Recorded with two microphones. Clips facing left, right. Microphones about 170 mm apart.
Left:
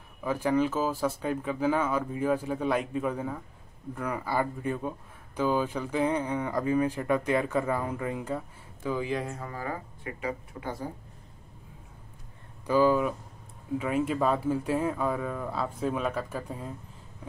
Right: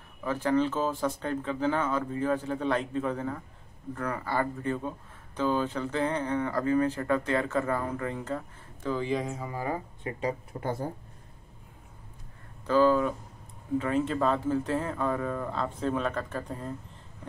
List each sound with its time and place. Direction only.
0.2 s speech: 10° left (ahead or behind)
9.5 s speech: 20° right (ahead or behind)
10.2 s speech: 45° right (ahead or behind)
12.6 s speech: 10° left (ahead or behind)